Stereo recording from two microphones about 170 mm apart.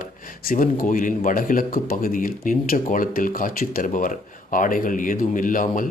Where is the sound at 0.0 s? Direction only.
55° left (ahead or behind).